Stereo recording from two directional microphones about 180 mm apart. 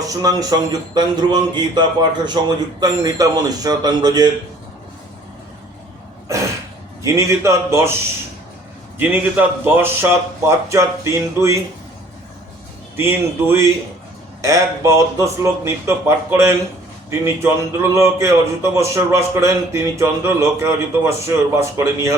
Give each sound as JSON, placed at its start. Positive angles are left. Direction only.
{"t": 0.1, "sound": "a man's voice", "side_deg": -20}
{"t": 7.0, "sound": "speech", "side_deg": -15}
{"t": 9.0, "sound": "speech", "side_deg": -10}
{"t": 13.0, "sound": "speech", "side_deg": -15}